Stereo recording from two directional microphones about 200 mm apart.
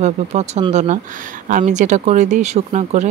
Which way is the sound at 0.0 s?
35° right (ahead or behind).